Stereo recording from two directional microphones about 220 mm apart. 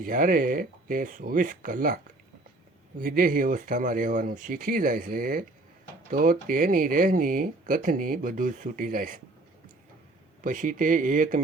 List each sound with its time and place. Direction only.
0.0 s speech: 40° right (ahead or behind)
3.0 s speech: 40° right (ahead or behind)
10.4 s speech: 35° right (ahead or behind)